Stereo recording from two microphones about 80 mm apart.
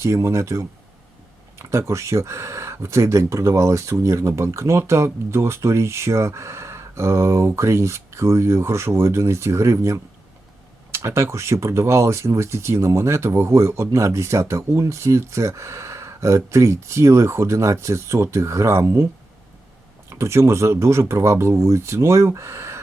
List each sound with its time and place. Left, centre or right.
0.0 s speech: right
20.1 s speech: right